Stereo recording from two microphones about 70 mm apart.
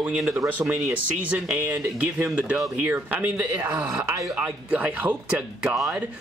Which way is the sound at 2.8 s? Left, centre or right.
Right.